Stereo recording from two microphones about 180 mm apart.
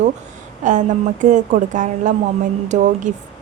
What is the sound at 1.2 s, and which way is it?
A woman's voice, 45° right (ahead or behind).